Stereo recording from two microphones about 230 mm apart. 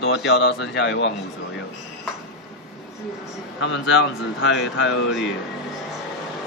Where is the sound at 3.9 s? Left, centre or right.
Left.